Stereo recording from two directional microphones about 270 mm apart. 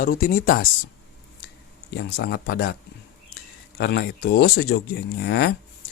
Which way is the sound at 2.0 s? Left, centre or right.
Left.